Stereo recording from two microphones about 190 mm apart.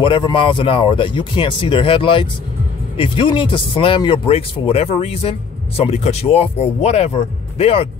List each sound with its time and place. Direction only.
0.0 s speech: 25° left (ahead or behind)